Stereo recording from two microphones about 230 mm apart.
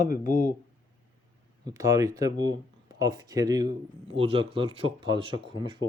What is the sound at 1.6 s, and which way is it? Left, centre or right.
Speech, centre.